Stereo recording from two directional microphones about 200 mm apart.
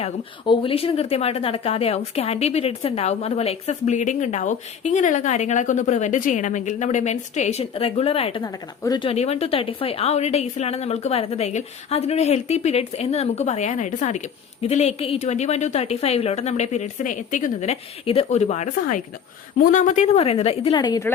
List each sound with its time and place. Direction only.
0.0 s a woman's voice: 25° left (ahead or behind)